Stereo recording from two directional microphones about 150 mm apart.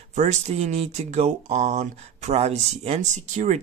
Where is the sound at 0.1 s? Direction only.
50° right (ahead or behind).